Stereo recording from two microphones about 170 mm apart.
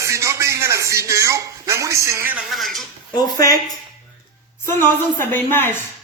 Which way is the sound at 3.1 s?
25° left (ahead or behind).